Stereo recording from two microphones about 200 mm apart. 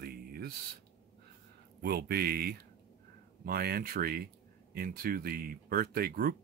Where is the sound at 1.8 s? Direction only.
50° right (ahead or behind).